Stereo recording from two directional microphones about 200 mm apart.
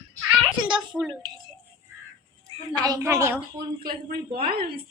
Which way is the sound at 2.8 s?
15° right (ahead or behind).